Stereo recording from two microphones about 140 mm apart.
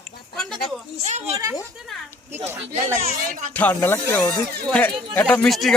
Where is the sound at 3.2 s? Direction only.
80° right.